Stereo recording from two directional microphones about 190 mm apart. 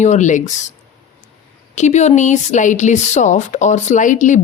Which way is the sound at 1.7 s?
35° left (ahead or behind).